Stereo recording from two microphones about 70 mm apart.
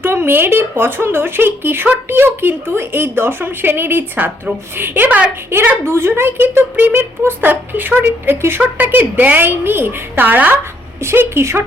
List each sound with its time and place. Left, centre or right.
0.0 s a woman's voice: right
5.5 s a woman's voice: right
11.0 s speech: right